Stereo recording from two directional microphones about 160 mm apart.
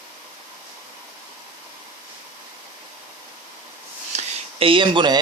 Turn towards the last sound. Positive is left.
turn(degrees=-30)  # may be behind; listen again after turning